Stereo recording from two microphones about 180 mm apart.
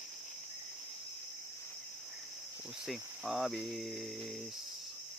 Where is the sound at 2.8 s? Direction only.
Centre (ahead or behind).